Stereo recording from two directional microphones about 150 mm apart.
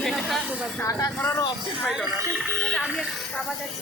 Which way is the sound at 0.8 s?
20° left (ahead or behind).